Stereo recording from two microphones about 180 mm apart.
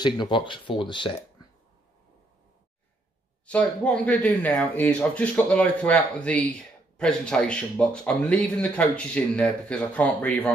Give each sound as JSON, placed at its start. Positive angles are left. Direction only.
{"t": 0.0, "sound": "speech", "side_deg": 25}
{"t": 3.4, "sound": "speech", "side_deg": 5}